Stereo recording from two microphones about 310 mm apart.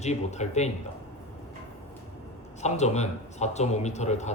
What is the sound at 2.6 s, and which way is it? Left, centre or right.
Speech, left.